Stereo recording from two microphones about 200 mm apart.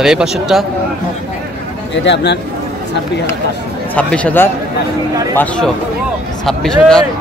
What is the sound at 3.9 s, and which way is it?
A man's voice, 5° left (ahead or behind).